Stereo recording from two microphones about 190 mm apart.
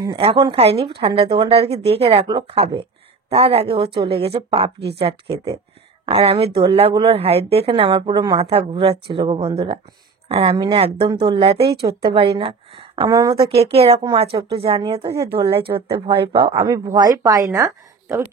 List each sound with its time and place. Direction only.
0.0 s speech: 30° right (ahead or behind)
6.0 s speech: 30° right (ahead or behind)